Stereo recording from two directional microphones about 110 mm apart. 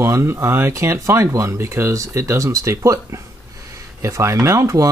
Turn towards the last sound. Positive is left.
turn(degrees=-30)  # may be behind; listen again after turning